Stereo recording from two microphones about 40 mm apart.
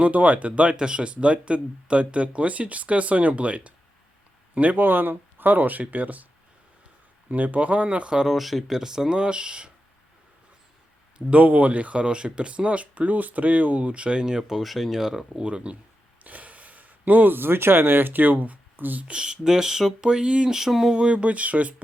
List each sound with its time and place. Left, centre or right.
0.0 s speech: right
4.8 s speech: right
7.3 s speech: right
8.3 s speech: centre
8.8 s speech: centre
11.3 s speech: right; by 14.6 s centre
14.6 s speech: centre
15.4 s speech: right
16.2 s speech: right
19.0 s speech: right
20.1 s speech: right
20.5 s speech: centre
20.9 s speech: right